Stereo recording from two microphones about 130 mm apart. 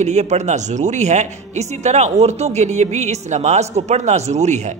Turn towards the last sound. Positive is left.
turn(degrees=-65)  # may be behind; listen again after turning